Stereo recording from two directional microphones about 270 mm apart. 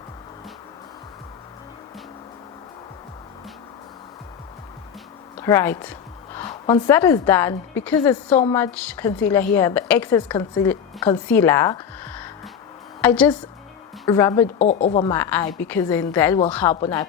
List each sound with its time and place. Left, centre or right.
5.4 s a woman's voice: centre
8.5 s a woman's voice: centre
14.6 s speech: left
15.0 s a woman's voice: centre